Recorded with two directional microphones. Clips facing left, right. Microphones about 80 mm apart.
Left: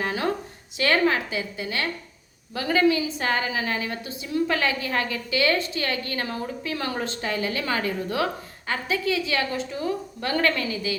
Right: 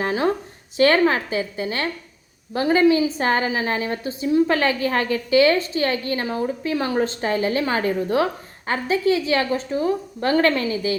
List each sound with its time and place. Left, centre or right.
0.0 s a woman's voice: right